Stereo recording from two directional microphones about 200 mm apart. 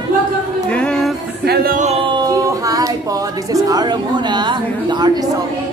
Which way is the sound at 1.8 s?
30° right (ahead or behind).